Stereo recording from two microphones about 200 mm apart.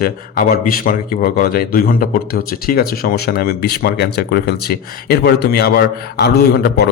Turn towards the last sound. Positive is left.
turn(degrees=50)  # may be behind; listen again after turning